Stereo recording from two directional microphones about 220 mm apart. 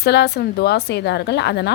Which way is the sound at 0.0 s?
50° left (ahead or behind).